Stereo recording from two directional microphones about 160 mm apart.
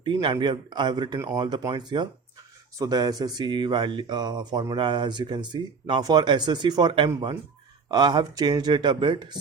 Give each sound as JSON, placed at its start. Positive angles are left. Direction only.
{"t": 0.0, "sound": "speech", "side_deg": -30}